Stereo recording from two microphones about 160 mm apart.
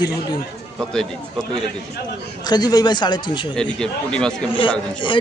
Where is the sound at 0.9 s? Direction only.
5° left (ahead or behind).